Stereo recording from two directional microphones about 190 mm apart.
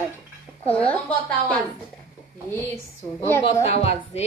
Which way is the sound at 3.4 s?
30° left (ahead or behind).